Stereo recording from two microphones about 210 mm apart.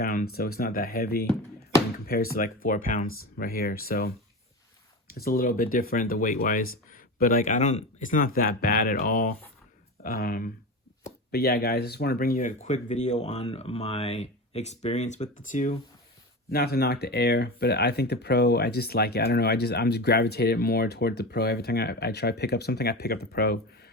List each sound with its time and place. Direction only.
0.0 s a sound: 45° left (ahead or behind)
0.3 s speech: 45° left (ahead or behind)
5.1 s speech: 45° left (ahead or behind)
16.5 s speech: 50° left (ahead or behind)